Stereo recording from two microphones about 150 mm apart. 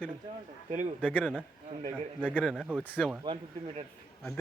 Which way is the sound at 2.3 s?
5° left (ahead or behind).